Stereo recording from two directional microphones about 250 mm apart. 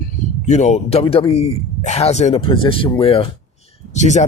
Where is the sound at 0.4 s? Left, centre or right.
Left.